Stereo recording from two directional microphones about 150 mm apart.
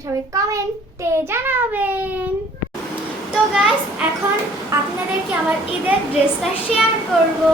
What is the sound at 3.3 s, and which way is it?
Speech, 5° right (ahead or behind).